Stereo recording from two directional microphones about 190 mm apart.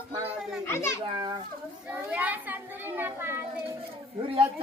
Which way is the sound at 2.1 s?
10° right (ahead or behind).